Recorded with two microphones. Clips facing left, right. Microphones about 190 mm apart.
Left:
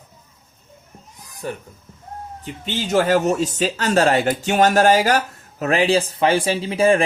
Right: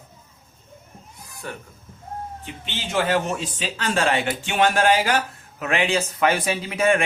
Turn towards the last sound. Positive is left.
turn(degrees=30)  # may be behind; listen again after turning